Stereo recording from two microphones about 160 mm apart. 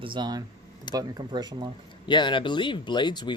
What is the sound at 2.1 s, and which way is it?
Speech, 30° left (ahead or behind).